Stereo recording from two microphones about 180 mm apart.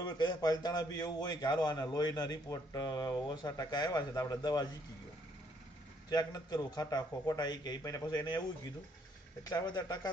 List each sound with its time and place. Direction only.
0.0 s a man's voice: 25° left (ahead or behind)
6.0 s a man's voice: 20° left (ahead or behind)